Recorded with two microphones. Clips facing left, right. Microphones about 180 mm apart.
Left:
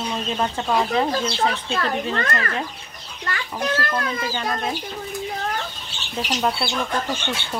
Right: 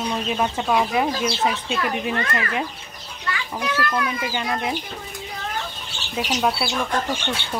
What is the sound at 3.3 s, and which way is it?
Speech, 50° left (ahead or behind).